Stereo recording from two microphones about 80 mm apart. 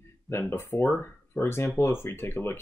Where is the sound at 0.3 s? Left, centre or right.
Left.